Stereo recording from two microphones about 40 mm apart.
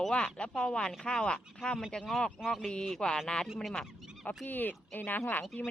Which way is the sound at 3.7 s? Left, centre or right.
Left.